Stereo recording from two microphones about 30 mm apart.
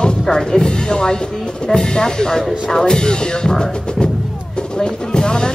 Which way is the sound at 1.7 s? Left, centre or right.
Left.